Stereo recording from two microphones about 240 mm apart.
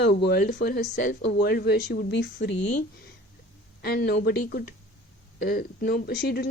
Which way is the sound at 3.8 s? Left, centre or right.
Left.